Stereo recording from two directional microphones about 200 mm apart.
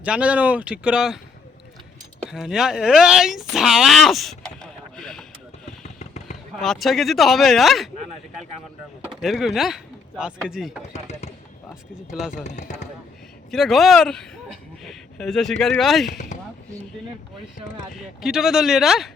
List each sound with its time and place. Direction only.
0.0 s speech: 5° right (ahead or behind)
2.3 s speech: centre (ahead or behind)
5.8 s a sound: 35° left (ahead or behind)
6.6 s speech: centre (ahead or behind)
9.2 s speech: centre (ahead or behind)
10.9 s speech: 35° left (ahead or behind)
11.7 s speech: centre (ahead or behind)
12.3 s speech: 35° left (ahead or behind)
13.5 s speech: centre (ahead or behind)
16.0 s speech: 35° left (ahead or behind)
18.2 s speech: centre (ahead or behind)